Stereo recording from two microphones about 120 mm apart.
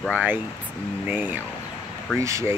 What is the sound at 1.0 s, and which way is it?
Speech, 15° right (ahead or behind).